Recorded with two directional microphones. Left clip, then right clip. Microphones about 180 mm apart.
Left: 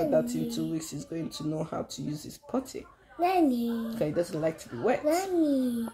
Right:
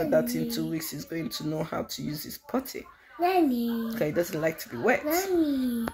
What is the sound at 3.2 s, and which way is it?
Speech, 55° left (ahead or behind).